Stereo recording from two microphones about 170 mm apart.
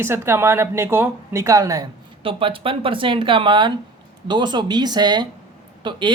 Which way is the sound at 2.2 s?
30° right (ahead or behind).